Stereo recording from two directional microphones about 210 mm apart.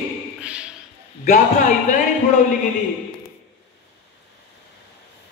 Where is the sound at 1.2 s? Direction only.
35° left (ahead or behind).